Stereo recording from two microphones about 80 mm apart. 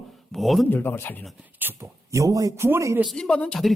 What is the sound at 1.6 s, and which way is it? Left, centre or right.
Speech, right.